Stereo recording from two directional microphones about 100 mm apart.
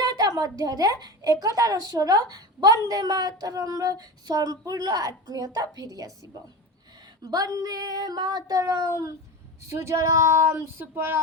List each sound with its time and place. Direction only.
0.0 s a woman's voice: 40° right (ahead or behind)
7.2 s speech: 40° right (ahead or behind); by 11.2 s 20° right (ahead or behind)